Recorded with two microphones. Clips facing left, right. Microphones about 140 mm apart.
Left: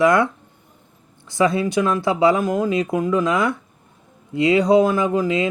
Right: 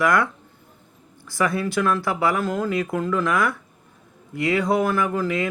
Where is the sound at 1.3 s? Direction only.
20° left (ahead or behind).